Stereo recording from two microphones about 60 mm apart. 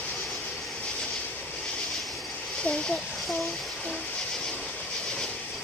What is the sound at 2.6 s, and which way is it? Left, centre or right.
Speech, centre.